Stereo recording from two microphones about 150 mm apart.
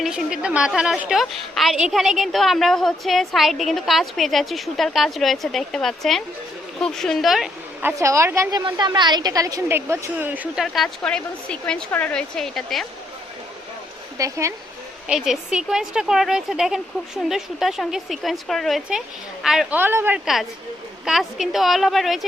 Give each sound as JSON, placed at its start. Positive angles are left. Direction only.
{"t": 0.0, "sound": "a woman's voice", "side_deg": -5}
{"t": 7.8, "sound": "a woman's voice", "side_deg": -15}
{"t": 14.2, "sound": "speech", "side_deg": -20}
{"t": 15.0, "sound": "a woman's voice", "side_deg": -5}
{"t": 19.8, "sound": "a woman's voice", "side_deg": -15}
{"t": 21.0, "sound": "a woman's voice", "side_deg": 0}